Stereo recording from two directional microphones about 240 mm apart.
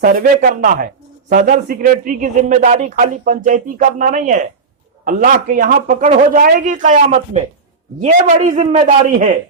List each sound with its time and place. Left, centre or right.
0.0 s a man's voice: right